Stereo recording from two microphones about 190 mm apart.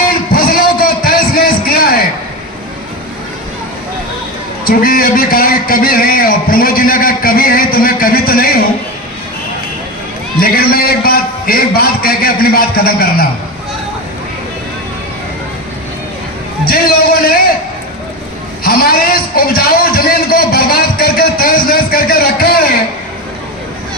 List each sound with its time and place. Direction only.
0.1 s a sound: 50° left (ahead or behind)
4.6 s a man's voice: 50° left (ahead or behind)
10.4 s a man's voice: 50° left (ahead or behind)
16.6 s a man's voice: 50° left (ahead or behind)
18.6 s a man's voice: 50° left (ahead or behind)